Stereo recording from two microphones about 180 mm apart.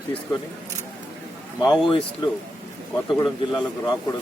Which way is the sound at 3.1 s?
20° left (ahead or behind).